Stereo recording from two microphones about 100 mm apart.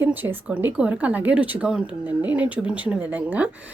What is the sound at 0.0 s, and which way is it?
A woman's voice, 20° right (ahead or behind).